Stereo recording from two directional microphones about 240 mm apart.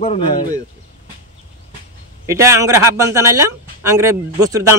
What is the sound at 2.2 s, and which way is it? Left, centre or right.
Speech, centre.